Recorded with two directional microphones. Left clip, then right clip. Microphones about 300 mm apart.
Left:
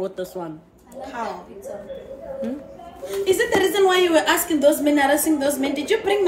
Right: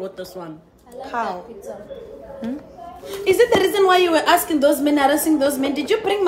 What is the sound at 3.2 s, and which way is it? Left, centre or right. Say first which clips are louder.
A woman's voice: right 4 dB; centre.